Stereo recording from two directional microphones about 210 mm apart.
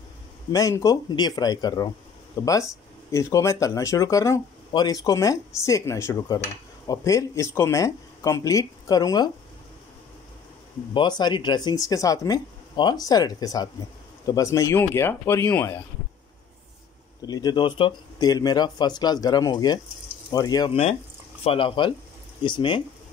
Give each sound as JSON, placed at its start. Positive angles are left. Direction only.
{"t": 0.5, "sound": "speech", "side_deg": 15}
{"t": 10.9, "sound": "speech", "side_deg": 20}
{"t": 17.3, "sound": "speech", "side_deg": 20}